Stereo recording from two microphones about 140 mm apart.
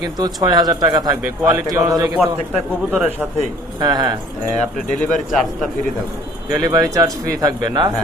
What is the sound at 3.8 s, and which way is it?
Speech, 30° right (ahead or behind).